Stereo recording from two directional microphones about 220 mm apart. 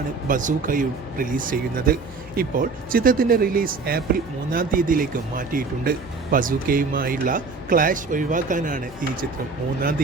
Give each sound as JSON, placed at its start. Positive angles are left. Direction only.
{"t": 0.3, "sound": "speech", "side_deg": -35}